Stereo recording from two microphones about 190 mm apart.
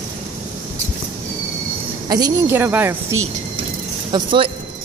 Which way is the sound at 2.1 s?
15° right (ahead or behind).